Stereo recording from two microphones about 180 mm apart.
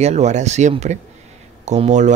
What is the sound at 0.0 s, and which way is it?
Speech, 40° right (ahead or behind).